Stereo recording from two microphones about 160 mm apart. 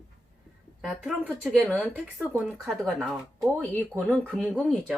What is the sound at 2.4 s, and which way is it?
Speech, centre (ahead or behind).